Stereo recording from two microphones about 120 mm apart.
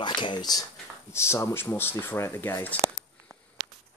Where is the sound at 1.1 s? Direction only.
20° left (ahead or behind).